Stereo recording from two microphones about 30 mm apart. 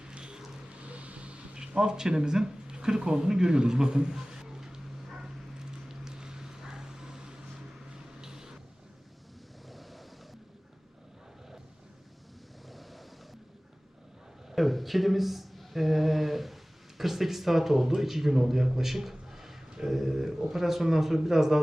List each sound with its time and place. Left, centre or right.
0.0 s vehicle: right
0.8 s vehicle: right
1.5 s a sound: right
8.2 s vehicle: right
9.6 s vehicle: centre
12.6 s waves: centre
14.5 s a sound: centre
17.0 s a man's voice: centre